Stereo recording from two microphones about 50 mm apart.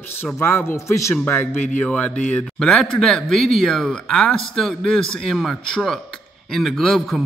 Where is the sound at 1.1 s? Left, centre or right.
Left.